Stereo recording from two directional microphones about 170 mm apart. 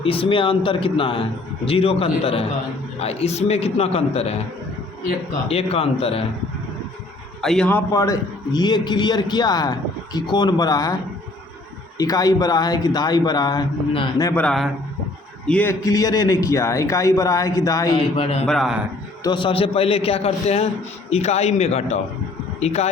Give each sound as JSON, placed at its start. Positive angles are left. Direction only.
{"t": 0.0, "sound": "a man's voice", "side_deg": 30}
{"t": 5.5, "sound": "a man's voice", "side_deg": 35}
{"t": 7.4, "sound": "a man's voice", "side_deg": 5}
{"t": 11.9, "sound": "a man's voice", "side_deg": 20}
{"t": 14.2, "sound": "speech", "side_deg": 15}
{"t": 14.4, "sound": "a man's voice", "side_deg": 0}
{"t": 15.8, "sound": "a man's voice", "side_deg": 20}
{"t": 17.9, "sound": "a man's voice", "side_deg": 35}
{"t": 18.4, "sound": "a man's voice", "side_deg": 0}
{"t": 19.2, "sound": "a man's voice", "side_deg": 30}